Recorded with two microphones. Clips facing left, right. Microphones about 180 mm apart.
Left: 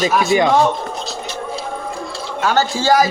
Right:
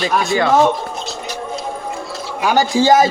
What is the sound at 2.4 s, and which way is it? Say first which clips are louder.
Speech: right 3 dB; 15° right (ahead or behind).